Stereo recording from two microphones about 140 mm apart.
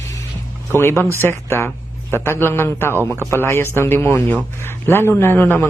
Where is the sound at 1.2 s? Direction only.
15° left (ahead or behind).